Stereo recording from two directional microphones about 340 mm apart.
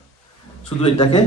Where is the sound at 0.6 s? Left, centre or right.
Centre.